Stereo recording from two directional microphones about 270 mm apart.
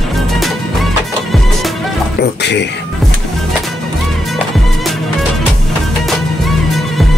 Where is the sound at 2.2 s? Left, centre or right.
Left.